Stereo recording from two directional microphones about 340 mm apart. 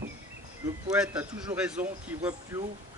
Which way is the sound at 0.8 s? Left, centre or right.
Centre.